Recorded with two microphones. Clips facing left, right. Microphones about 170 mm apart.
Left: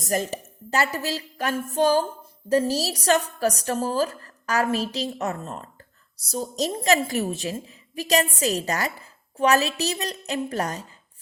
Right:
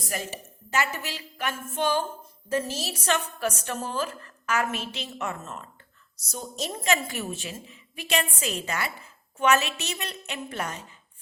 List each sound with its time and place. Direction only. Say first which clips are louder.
0.0 s a woman's voice: left 8 dB; 40° left (ahead or behind)